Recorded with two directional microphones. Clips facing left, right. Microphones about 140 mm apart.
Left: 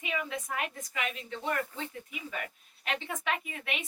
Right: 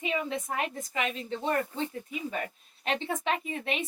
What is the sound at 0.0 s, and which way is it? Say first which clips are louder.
A woman's voice: right 4 dB; 30° right (ahead or behind).